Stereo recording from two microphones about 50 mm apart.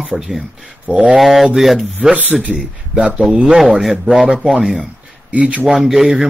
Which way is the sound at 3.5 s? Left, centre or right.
Centre.